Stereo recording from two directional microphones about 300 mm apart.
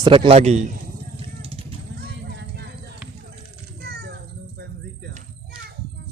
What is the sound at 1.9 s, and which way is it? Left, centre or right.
Clip-clop, right.